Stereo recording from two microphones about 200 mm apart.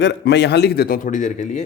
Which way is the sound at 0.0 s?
60° left (ahead or behind).